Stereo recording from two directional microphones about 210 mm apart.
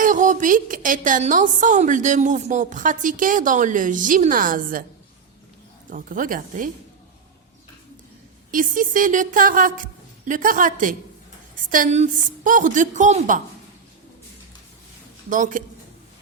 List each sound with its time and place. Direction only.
0.0 s a woman's voice: 40° right (ahead or behind)
5.9 s a woman's voice: 40° right (ahead or behind)
8.4 s a woman's voice: 40° right (ahead or behind)
15.3 s a woman's voice: 40° right (ahead or behind)